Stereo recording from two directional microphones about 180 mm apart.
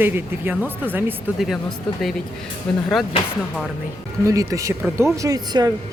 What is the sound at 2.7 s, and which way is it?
Speech, 5° left (ahead or behind).